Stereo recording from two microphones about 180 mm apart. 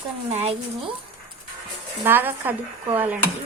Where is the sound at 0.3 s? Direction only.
35° right (ahead or behind).